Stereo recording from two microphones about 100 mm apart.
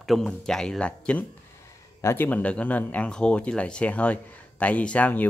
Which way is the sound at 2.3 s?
15° left (ahead or behind).